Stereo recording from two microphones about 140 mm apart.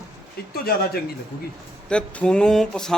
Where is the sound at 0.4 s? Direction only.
90° left.